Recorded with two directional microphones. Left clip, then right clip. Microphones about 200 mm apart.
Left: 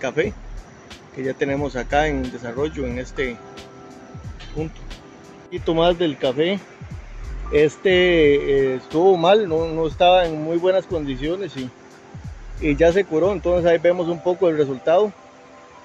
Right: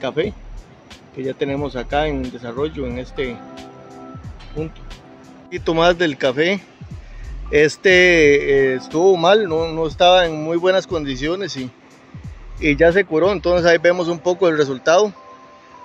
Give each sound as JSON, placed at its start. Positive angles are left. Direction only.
{"t": 0.0, "sound": "speech", "side_deg": -25}
{"t": 5.5, "sound": "speech", "side_deg": -10}
{"t": 12.5, "sound": "speech", "side_deg": -15}